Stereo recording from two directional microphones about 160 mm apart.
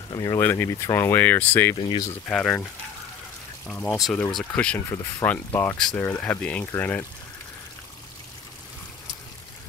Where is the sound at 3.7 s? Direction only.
10° left (ahead or behind).